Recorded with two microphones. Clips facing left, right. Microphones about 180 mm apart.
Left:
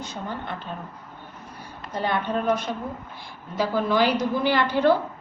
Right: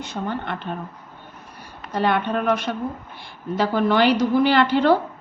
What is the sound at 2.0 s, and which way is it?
A woman's voice, 70° right (ahead or behind).